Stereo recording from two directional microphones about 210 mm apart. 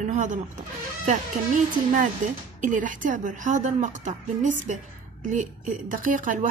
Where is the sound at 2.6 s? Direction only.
40° right (ahead or behind).